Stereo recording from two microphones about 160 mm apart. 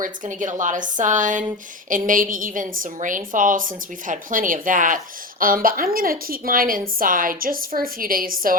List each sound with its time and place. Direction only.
0.0 s a woman's voice: 55° right (ahead or behind)